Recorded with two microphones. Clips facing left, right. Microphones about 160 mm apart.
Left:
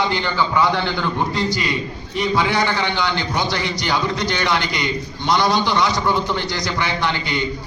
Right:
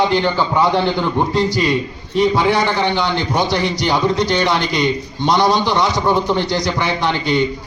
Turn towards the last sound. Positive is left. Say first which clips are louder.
# right 5 dB
turn(degrees=-25)  # may be behind; listen again after turning